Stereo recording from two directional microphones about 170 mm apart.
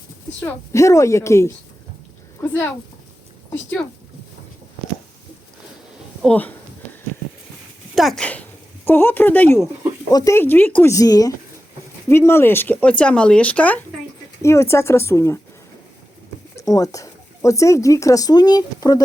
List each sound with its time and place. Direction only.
0.3 s speech: 15° left (ahead or behind)
6.2 s speech: 10° left (ahead or behind)
7.9 s speech: centre (ahead or behind)
10.1 s speech: 20° left (ahead or behind)
16.6 s speech: 20° left (ahead or behind)